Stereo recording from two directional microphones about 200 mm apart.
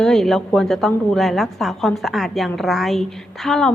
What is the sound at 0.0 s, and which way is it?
A woman's voice, centre (ahead or behind).